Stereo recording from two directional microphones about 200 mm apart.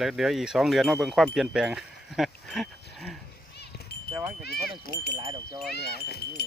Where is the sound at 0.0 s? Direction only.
Centre (ahead or behind).